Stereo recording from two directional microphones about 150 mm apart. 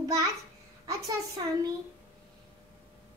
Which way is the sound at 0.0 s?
20° right (ahead or behind).